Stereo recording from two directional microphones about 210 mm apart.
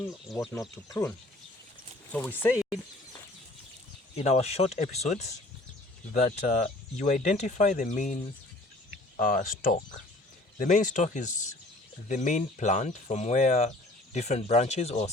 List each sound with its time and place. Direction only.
2.1 s speech: 10° left (ahead or behind)
4.1 s speech: 30° left (ahead or behind)